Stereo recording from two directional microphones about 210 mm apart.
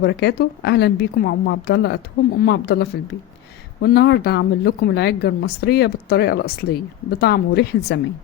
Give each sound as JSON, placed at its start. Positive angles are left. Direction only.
{"t": 0.0, "sound": "a woman's voice", "side_deg": 50}